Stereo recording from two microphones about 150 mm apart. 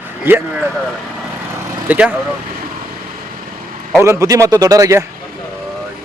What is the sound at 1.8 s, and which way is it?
Vehicle, 10° right (ahead or behind).